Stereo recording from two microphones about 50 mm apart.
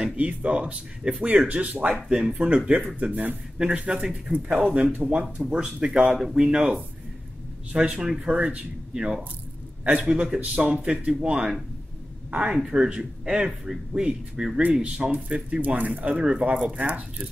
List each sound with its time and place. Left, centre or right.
0.0 s speech: right
2.0 s speech: centre
3.0 s a man's voice: right; by 6.6 s centre
7.7 s speech: centre